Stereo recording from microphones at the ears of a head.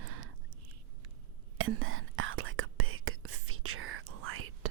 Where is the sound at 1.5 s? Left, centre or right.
Right.